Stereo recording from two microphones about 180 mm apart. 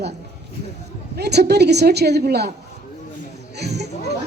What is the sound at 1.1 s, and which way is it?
A woman's voice, 65° right (ahead or behind).